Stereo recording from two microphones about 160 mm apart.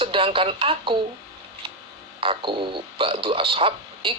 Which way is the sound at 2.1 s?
30° right (ahead or behind).